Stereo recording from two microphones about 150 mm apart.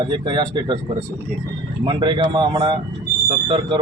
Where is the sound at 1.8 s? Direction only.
30° right (ahead or behind).